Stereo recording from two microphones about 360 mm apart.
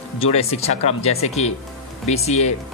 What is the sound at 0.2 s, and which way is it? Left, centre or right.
Speech, centre.